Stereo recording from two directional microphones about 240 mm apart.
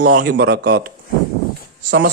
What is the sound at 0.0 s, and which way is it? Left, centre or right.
Speech, right.